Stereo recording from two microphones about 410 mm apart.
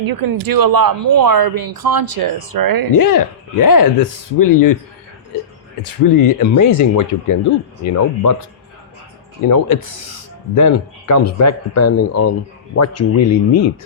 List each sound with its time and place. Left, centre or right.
0.0 s speech: right
3.0 s speech: left
5.8 s speech: left
9.5 s speech: left